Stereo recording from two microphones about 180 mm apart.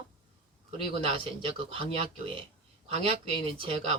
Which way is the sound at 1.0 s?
30° right (ahead or behind).